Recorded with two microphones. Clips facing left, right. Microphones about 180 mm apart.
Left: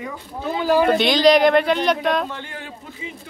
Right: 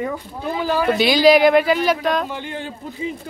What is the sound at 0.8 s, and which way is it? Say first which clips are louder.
Speech: right 3 dB; 5° right (ahead or behind).